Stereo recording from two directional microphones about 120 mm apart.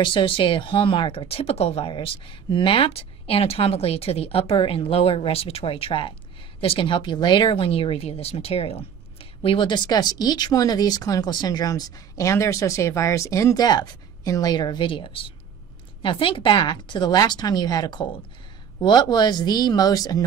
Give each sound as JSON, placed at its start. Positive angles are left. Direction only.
{"t": 0.0, "sound": "speech", "side_deg": 45}